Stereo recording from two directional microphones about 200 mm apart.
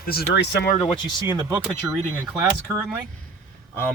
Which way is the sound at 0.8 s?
25° left (ahead or behind).